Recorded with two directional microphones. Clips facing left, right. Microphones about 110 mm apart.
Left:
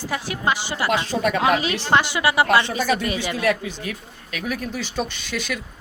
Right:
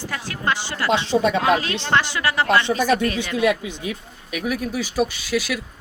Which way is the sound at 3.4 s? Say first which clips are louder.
Right 4 dB; 15° right (ahead or behind).